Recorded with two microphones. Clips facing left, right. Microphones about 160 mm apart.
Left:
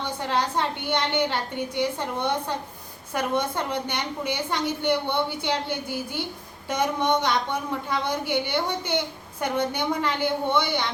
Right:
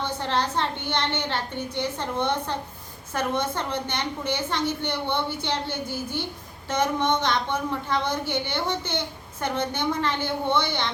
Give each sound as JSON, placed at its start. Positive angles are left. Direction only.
{"t": 0.2, "sound": "a woman's voice", "side_deg": 10}